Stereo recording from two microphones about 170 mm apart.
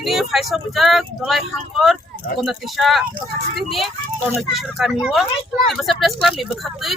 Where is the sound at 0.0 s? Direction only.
Centre (ahead or behind).